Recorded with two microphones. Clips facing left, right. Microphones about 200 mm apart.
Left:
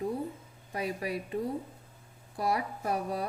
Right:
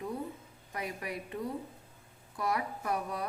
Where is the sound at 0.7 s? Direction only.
30° left (ahead or behind).